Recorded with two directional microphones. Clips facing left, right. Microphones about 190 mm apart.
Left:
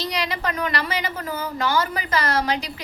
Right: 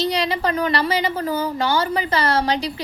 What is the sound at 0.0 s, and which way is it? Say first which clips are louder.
A woman's voice: right 5 dB; 30° right (ahead or behind).